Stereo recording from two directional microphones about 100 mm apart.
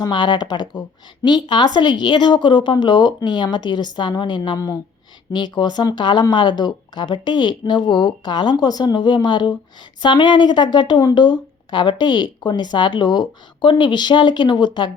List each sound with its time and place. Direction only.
0.0 s a woman's voice: 50° left (ahead or behind)
4.5 s speech: 35° left (ahead or behind)
5.3 s a woman's voice: 50° left (ahead or behind)